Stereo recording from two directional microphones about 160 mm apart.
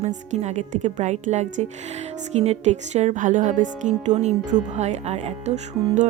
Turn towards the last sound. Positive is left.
turn(degrees=-45)  # may be behind; listen again after turning